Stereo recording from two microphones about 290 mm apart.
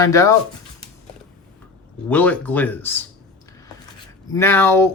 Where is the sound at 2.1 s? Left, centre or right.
Centre.